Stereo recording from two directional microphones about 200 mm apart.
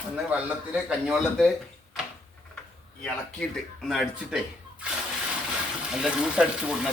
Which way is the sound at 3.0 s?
5° left (ahead or behind).